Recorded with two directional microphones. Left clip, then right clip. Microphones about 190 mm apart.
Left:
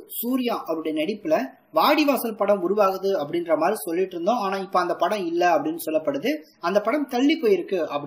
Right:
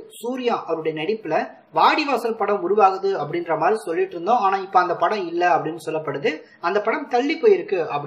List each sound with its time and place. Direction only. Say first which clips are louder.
0.3 s speech: right 3 dB; 50° left (ahead or behind)